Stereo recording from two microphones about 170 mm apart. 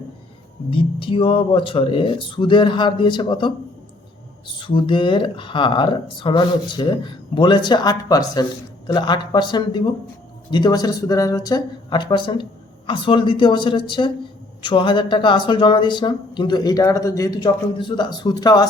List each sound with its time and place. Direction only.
0.7 s speech: 30° left (ahead or behind)
4.6 s speech: 30° left (ahead or behind)